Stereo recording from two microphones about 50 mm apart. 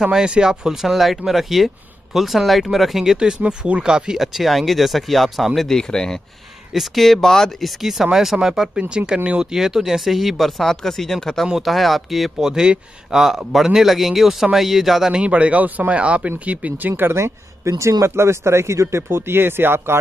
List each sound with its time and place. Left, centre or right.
0.0 s speech: centre
3.3 s speech: right; by 6.2 s centre
6.7 s speech: centre
7.8 s speech: centre
12.4 s speech: centre
15.1 s speech: right
16.3 s speech: right
17.2 s a man's voice: right